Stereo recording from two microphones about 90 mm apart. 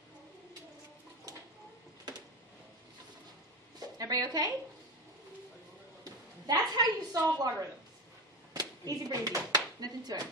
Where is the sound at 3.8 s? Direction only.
45° right (ahead or behind).